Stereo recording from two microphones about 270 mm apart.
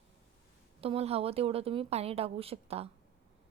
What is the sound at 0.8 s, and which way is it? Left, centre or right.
Speech, right.